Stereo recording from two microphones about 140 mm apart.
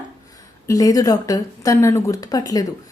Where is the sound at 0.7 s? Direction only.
25° left (ahead or behind).